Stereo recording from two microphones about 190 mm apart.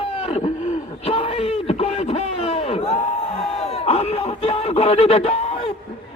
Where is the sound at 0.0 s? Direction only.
30° left (ahead or behind).